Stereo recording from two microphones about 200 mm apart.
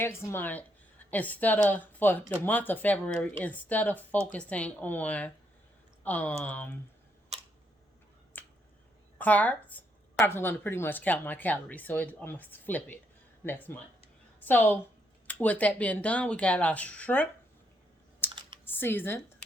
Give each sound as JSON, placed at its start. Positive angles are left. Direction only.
{"t": 0.0, "sound": "a woman's voice", "side_deg": 15}
{"t": 8.4, "sound": "finger snapping", "side_deg": 10}
{"t": 9.1, "sound": "a woman's voice", "side_deg": 10}
{"t": 18.2, "sound": "typing", "side_deg": 10}
{"t": 18.6, "sound": "speech", "side_deg": 10}